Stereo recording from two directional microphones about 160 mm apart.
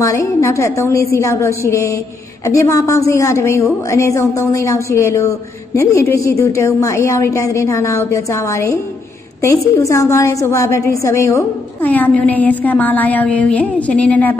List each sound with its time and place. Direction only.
0.0 s a woman's voice: 20° left (ahead or behind)